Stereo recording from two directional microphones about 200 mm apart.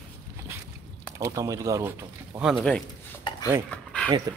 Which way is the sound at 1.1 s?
15° right (ahead or behind).